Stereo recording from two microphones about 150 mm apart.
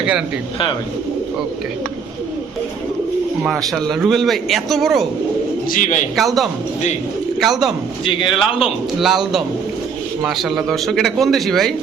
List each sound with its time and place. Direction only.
3.4 s speech: centre (ahead or behind)
5.6 s speech: 70° left (ahead or behind)
6.1 s speech: centre (ahead or behind)
8.0 s a man's voice: 35° left (ahead or behind)
9.0 s speech: centre (ahead or behind)